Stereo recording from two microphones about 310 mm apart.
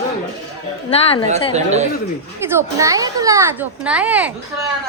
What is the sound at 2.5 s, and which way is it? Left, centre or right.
A child's voice, centre.